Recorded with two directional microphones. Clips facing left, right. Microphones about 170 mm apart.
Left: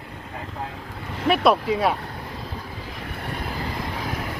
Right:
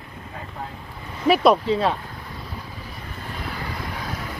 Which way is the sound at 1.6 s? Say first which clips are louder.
Even; 10° left (ahead or behind).